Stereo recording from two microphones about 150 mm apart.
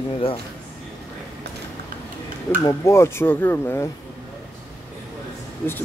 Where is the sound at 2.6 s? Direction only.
20° left (ahead or behind).